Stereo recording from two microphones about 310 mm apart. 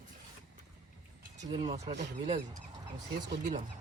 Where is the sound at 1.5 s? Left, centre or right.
Centre.